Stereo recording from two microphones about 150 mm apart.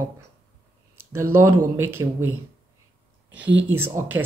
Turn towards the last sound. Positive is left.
turn(degrees=-15)  # may be behind; listen again after turning